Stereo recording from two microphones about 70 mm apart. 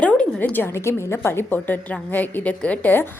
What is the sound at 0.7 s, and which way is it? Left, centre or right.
A woman's voice, left.